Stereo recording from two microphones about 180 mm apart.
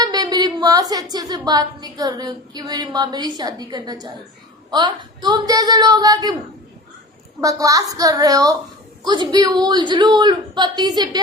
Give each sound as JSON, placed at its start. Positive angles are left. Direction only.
{"t": 0.0, "sound": "a woman's voice", "side_deg": -20}
{"t": 7.4, "sound": "a woman's voice", "side_deg": -20}